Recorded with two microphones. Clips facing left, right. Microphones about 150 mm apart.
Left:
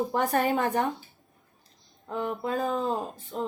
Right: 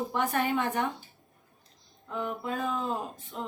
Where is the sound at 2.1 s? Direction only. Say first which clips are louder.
Left 3 dB; 35° left (ahead or behind).